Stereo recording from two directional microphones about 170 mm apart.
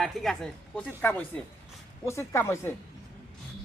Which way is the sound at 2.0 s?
15° left (ahead or behind).